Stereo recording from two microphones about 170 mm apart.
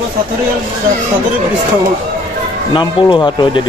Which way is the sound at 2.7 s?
25° left (ahead or behind).